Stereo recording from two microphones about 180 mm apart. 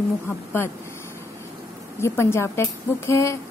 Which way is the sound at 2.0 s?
15° left (ahead or behind).